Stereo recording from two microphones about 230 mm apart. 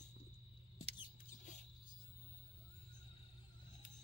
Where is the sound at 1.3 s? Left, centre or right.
Left.